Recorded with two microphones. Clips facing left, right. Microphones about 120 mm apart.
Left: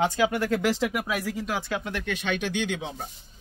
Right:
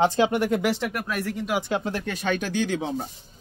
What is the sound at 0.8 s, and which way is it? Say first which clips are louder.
Speech: left 2 dB; 15° left (ahead or behind).